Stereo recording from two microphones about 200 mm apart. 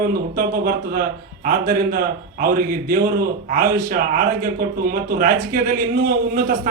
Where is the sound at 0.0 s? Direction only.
50° right (ahead or behind).